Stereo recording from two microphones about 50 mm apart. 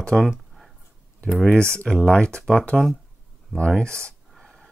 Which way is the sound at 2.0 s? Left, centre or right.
Centre.